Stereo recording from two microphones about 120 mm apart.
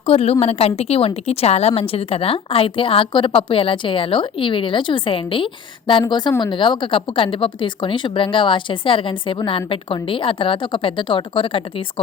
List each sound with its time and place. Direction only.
0.0 s a woman's voice: 55° left (ahead or behind)